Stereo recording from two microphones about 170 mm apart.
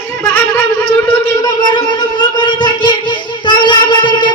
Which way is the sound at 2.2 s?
25° left (ahead or behind).